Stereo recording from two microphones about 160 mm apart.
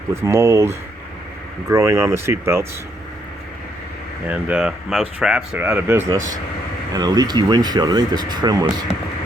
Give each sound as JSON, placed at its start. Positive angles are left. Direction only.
{"t": 0.1, "sound": "speech", "side_deg": -15}
{"t": 4.3, "sound": "speech", "side_deg": -10}